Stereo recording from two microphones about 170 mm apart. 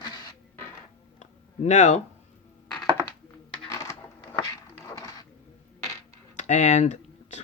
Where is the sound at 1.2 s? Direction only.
45° left (ahead or behind).